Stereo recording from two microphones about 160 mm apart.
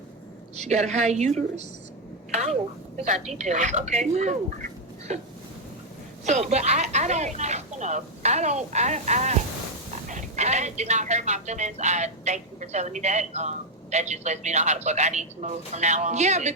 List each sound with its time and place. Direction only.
0.5 s speech: 45° right (ahead or behind)
3.0 s speech: 45° right (ahead or behind)
6.2 s speech: 45° right (ahead or behind)